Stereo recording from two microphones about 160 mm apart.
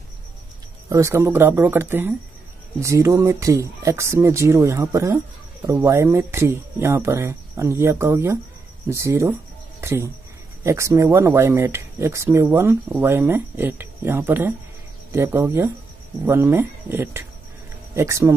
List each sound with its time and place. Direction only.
0.8 s speech: 20° right (ahead or behind)